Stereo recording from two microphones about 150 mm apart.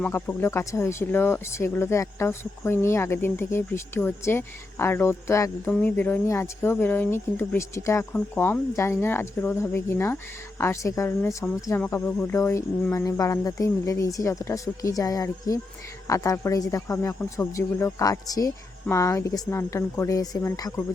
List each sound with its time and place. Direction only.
0.0 s speech: 15° left (ahead or behind)